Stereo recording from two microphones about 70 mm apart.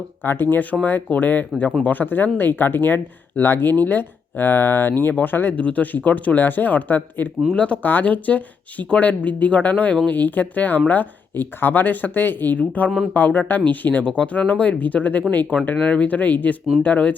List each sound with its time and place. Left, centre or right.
0.2 s speech: left